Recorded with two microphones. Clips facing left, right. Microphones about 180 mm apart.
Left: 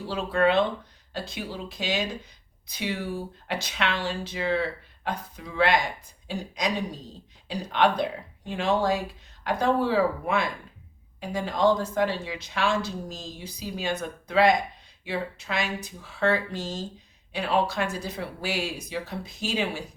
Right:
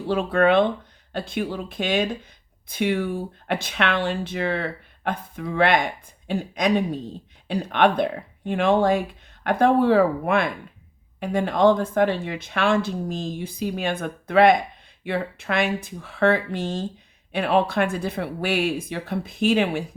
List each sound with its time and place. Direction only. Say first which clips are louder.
0.1 s speech: right 5 dB; 55° right (ahead or behind)